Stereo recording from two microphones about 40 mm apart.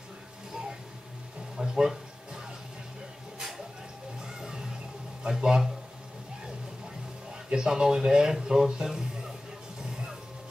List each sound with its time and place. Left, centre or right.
1.6 s a sound: centre
4.2 s music: centre
5.3 s speech: centre
7.4 s speech: centre
9.8 s music: centre